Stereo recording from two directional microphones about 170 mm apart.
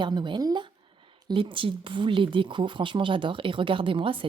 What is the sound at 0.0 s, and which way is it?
Speech, 25° right (ahead or behind).